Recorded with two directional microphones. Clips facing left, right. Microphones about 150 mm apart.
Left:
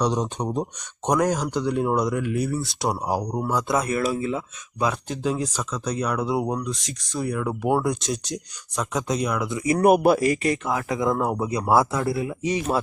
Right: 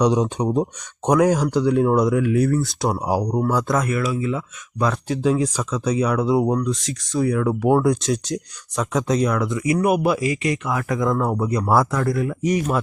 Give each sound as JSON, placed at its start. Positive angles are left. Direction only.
{"t": 0.0, "sound": "speech", "side_deg": -10}
{"t": 3.8, "sound": "speech", "side_deg": 35}
{"t": 5.0, "sound": "speech", "side_deg": 0}
{"t": 9.6, "sound": "speech", "side_deg": 45}